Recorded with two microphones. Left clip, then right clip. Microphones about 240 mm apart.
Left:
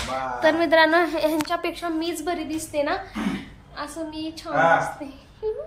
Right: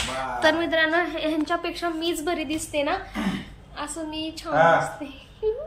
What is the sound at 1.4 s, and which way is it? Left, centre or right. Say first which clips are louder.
Speech: even; left.